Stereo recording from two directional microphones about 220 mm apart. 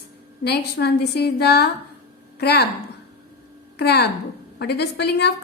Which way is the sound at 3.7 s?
50° left (ahead or behind).